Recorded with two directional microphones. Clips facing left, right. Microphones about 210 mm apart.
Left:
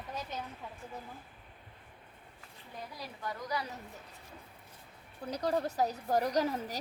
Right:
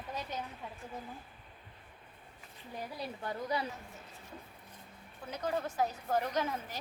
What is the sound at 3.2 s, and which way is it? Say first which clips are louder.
Speech: right 1 dB; 30° right (ahead or behind).